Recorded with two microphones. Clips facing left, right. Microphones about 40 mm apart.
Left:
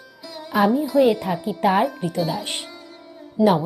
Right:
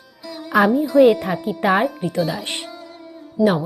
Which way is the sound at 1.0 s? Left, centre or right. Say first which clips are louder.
Right 4 dB; right.